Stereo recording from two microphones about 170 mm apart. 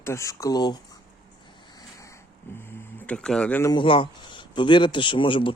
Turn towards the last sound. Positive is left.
turn(degrees=30)  # may be behind; listen again after turning